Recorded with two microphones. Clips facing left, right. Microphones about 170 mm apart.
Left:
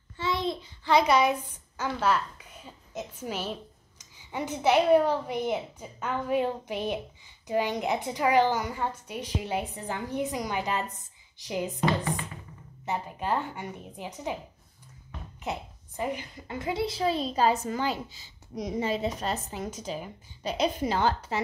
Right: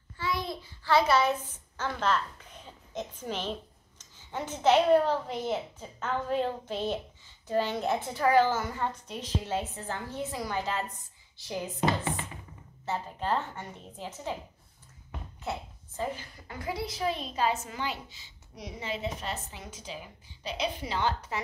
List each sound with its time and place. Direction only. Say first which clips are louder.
0.2 s a child's voice: left 4 dB; 25° left (ahead or behind)
12.8 s a woman's voice: left 1 dB; 15° left (ahead or behind)
15.4 s a woman's voice: left 2 dB; 15° left (ahead or behind); by 21.1 s 45° left (ahead or behind)
21.3 s speech: left 5 dB; 30° left (ahead or behind)